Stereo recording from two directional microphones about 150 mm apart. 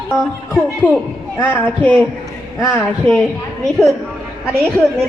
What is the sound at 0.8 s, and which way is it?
A woman's voice, 15° left (ahead or behind).